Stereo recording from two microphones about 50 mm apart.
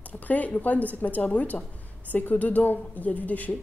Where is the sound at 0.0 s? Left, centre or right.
Left.